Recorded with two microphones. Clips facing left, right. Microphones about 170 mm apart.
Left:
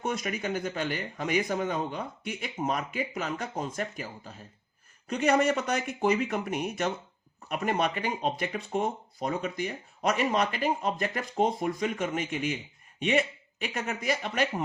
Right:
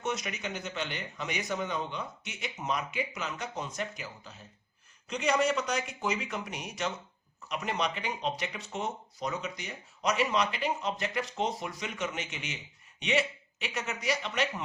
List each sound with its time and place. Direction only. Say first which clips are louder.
0.0 s a man's voice: left 3 dB; 50° left (ahead or behind)